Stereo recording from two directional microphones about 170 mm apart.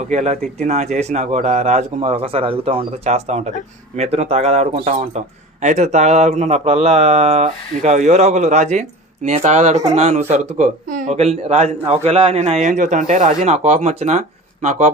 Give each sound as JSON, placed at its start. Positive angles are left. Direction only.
{"t": 0.1, "sound": "speech", "side_deg": -40}